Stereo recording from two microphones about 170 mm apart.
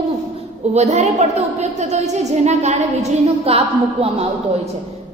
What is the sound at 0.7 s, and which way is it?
A woman's voice, 40° right (ahead or behind).